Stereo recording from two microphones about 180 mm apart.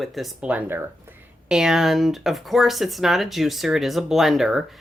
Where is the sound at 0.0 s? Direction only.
Centre (ahead or behind).